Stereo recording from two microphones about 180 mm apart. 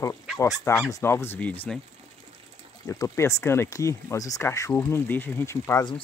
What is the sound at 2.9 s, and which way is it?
Speech, 15° left (ahead or behind).